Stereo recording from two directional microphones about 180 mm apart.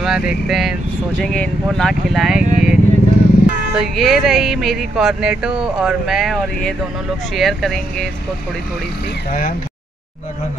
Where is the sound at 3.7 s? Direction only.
Centre (ahead or behind).